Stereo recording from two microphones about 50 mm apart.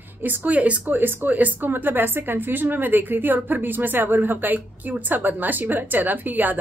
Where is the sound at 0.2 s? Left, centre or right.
Right.